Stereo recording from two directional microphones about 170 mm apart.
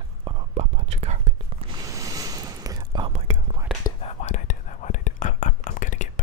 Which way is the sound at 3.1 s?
35° right (ahead or behind).